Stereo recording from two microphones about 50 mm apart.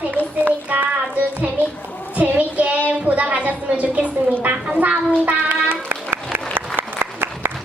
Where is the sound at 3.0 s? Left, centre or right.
Right.